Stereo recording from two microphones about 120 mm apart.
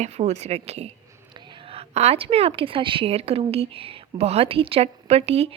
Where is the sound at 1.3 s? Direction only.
40° right (ahead or behind).